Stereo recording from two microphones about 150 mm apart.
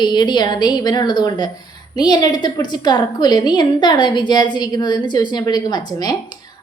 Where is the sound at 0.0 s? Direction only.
30° left (ahead or behind).